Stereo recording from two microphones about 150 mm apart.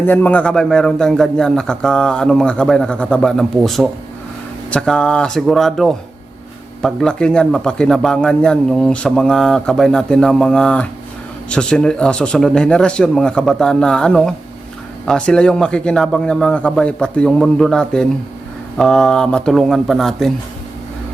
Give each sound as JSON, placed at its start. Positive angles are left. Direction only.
{"t": 0.0, "sound": "speech", "side_deg": 10}